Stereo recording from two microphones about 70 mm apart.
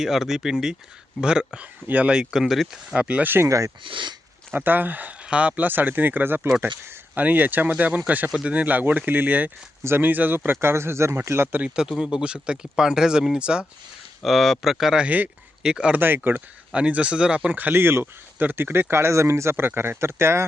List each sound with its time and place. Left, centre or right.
0.0 s speech: centre
2.9 s speech: centre
3.4 s speech: right
4.5 s speech: right
6.8 s a sound: right
7.3 s speech: right
11.6 s speech: centre
14.2 s speech: centre
15.0 s speech: right
15.6 s speech: centre
16.0 s speech: right
16.7 s speech: centre; by 20.4 s right